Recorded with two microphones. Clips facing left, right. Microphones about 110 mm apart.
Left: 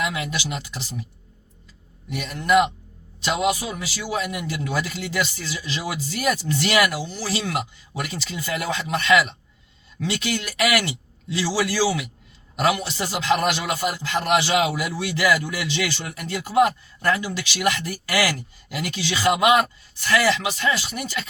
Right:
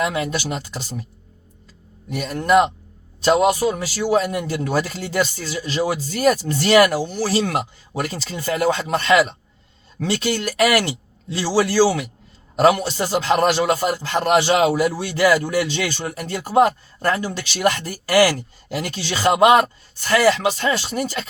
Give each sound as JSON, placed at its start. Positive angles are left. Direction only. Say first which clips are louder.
{"t": 0.0, "sound": "a man's voice", "louder": "right 5 dB", "side_deg": -40}
{"t": 2.0, "sound": "a man's voice", "louder": "right 3 dB", "side_deg": -40}